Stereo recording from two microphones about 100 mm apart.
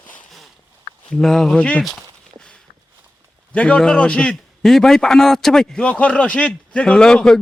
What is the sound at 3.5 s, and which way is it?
A man's voice, 10° left (ahead or behind).